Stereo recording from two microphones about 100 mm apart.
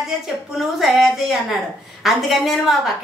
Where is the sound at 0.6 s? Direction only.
Centre (ahead or behind).